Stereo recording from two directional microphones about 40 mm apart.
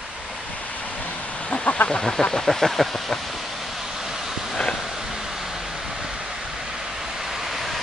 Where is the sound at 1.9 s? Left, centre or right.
Centre.